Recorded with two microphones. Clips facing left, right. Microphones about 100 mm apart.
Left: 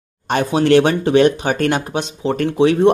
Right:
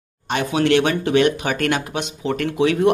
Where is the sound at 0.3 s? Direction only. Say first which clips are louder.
Left 4 dB; 35° left (ahead or behind).